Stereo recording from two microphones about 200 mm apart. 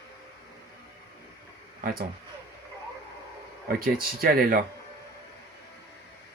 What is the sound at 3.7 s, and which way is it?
Speech, 45° right (ahead or behind).